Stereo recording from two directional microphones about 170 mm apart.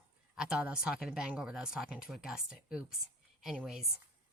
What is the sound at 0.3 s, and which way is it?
A woman's voice, 5° right (ahead or behind).